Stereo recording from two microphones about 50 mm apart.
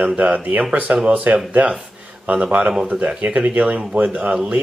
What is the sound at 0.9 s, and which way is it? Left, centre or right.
Speech, right.